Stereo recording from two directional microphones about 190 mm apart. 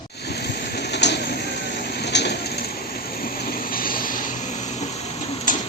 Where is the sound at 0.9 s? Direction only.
65° left (ahead or behind).